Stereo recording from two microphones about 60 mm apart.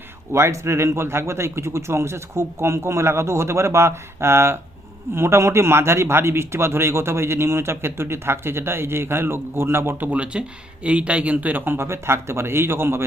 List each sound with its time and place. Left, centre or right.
0.3 s a man's voice: right
10.1 s speech: right